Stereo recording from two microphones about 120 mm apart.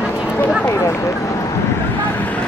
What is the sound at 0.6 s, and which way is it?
Run, 25° left (ahead or behind).